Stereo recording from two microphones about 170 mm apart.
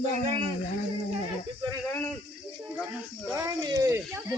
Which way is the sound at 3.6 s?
20° right (ahead or behind).